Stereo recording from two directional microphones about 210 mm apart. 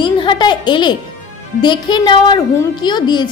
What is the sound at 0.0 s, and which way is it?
A child's voice, 20° left (ahead or behind).